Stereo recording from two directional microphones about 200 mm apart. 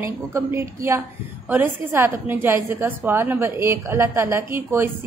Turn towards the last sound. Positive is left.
turn(degrees=-10)  # may be behind; listen again after turning